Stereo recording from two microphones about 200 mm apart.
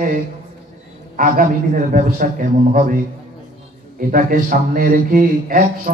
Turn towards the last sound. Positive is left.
turn(degrees=-45)  # may be behind; listen again after turning